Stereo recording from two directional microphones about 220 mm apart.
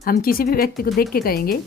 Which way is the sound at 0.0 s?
40° left (ahead or behind).